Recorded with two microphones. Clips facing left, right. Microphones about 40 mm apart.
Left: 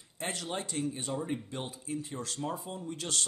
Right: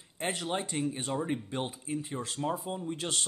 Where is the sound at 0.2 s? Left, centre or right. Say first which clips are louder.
Right 3 dB; right.